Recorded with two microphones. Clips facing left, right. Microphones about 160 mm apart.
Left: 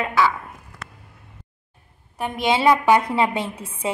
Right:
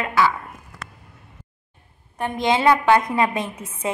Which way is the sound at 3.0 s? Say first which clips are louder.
Even; 30° left (ahead or behind).